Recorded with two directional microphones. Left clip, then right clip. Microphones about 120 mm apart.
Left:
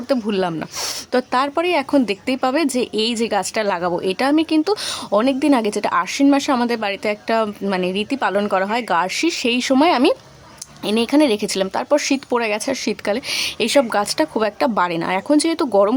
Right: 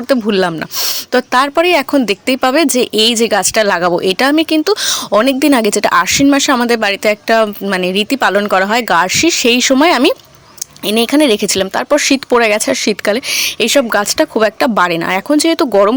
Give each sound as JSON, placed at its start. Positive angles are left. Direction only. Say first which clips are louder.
{"t": 0.1, "sound": "speech", "louder": "right 7 dB", "side_deg": -20}